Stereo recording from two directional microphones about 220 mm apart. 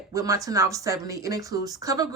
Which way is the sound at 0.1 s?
15° right (ahead or behind).